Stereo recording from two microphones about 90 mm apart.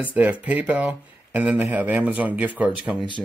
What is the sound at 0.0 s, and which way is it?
Speech, 15° right (ahead or behind).